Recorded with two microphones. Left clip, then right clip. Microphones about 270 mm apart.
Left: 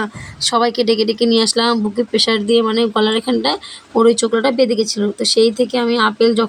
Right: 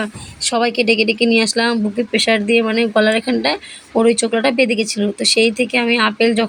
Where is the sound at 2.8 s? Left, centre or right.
Centre.